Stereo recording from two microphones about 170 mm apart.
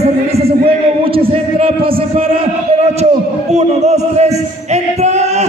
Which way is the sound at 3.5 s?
40° right (ahead or behind).